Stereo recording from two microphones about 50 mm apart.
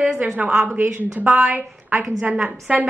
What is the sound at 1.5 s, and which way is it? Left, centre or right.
Speech, right.